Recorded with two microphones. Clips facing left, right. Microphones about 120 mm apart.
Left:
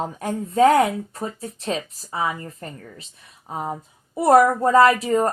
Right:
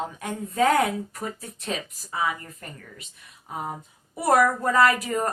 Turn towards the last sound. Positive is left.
turn(degrees=30)  # may be behind; listen again after turning